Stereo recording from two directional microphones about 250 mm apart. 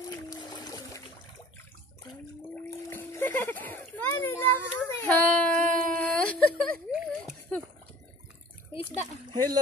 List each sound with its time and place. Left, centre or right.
0.1 s trickle: centre
2.9 s a sound: centre
9.3 s speech: centre